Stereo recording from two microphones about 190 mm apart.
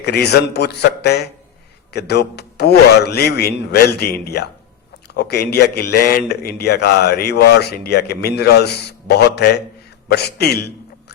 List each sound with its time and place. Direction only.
0.0 s a man's voice: 60° left (ahead or behind)